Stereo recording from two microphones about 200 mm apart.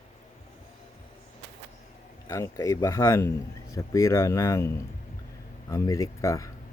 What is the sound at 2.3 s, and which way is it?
Speech, 15° left (ahead or behind).